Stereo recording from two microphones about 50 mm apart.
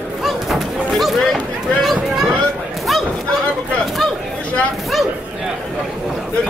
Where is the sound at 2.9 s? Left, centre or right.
Centre.